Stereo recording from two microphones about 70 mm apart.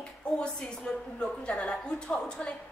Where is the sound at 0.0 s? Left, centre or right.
Centre.